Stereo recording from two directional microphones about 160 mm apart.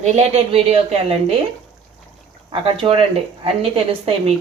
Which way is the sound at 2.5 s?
35° right (ahead or behind).